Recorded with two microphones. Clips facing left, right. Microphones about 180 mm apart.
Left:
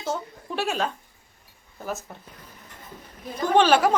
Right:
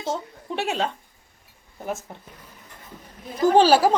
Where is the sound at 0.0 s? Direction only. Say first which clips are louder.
Right 1 dB; 25° right (ahead or behind).